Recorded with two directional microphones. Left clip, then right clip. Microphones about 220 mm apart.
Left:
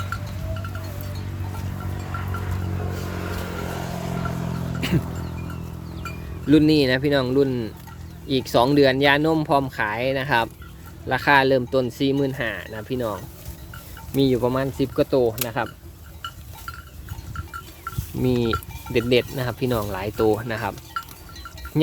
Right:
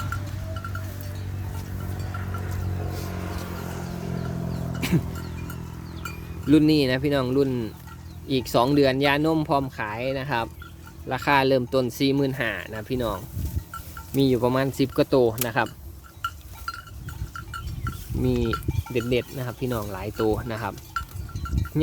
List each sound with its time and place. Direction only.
0.1 s music: 35° right (ahead or behind)
2.0 s vehicle: 45° left (ahead or behind); by 4.3 s 30° left (ahead or behind)
4.8 s wild animals: 10° right (ahead or behind)
6.5 s speech: 5° right (ahead or behind); by 15.7 s 25° right (ahead or behind)
18.2 s speech: centre (ahead or behind)